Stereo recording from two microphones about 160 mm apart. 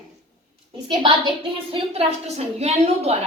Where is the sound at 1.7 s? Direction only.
40° right (ahead or behind).